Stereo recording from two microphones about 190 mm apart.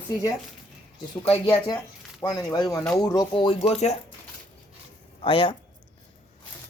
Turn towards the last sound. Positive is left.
turn(degrees=25)  # may be behind; listen again after turning